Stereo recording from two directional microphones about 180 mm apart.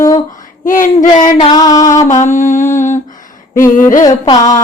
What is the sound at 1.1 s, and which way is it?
Female singing, 25° left (ahead or behind).